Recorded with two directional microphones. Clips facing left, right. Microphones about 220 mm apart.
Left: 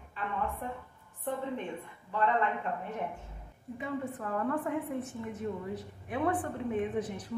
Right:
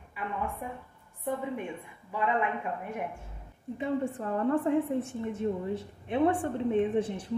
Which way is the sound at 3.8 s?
30° right (ahead or behind).